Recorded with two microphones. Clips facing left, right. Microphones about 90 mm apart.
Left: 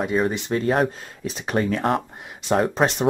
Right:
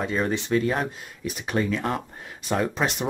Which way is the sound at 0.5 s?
45° left (ahead or behind).